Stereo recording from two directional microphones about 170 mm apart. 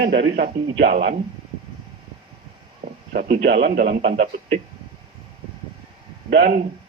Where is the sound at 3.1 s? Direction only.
70° right (ahead or behind).